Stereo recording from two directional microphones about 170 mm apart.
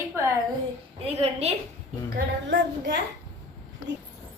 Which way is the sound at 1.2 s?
40° right (ahead or behind).